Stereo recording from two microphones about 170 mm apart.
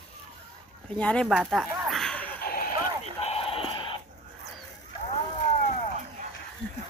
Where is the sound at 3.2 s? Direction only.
35° left (ahead or behind).